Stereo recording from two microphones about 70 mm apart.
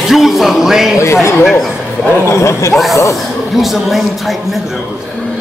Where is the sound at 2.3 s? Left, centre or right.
Left.